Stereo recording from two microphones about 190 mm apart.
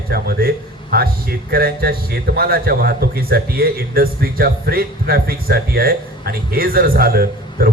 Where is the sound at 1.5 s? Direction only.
55° right (ahead or behind).